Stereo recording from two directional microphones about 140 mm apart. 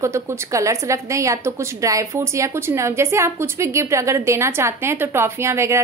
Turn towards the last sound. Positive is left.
turn(degrees=-20)  # may be behind; listen again after turning